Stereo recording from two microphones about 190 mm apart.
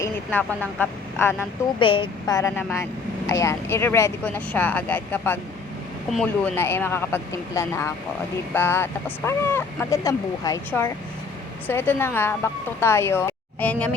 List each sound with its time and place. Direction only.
0.0 s speech: 10° left (ahead or behind)
1.8 s speech: 25° left (ahead or behind); by 6.5 s centre (ahead or behind)
6.6 s speech: 10° left (ahead or behind)